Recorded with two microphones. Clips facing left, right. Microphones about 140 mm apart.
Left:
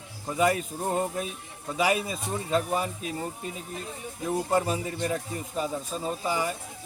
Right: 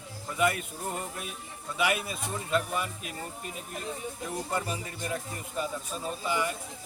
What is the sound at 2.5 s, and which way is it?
Speech, 35° left (ahead or behind).